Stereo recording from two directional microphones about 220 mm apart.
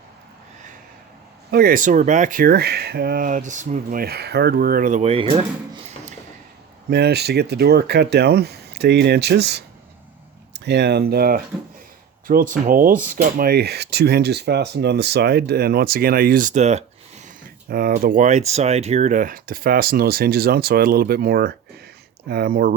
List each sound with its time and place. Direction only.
1.5 s speech: 45° right (ahead or behind); by 5.4 s 25° right (ahead or behind)
6.9 s speech: 50° right (ahead or behind); by 16.8 s 30° right (ahead or behind)
17.2 s speech: 40° right (ahead or behind)